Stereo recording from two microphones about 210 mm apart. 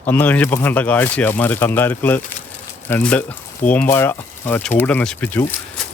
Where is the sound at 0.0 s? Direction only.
10° left (ahead or behind).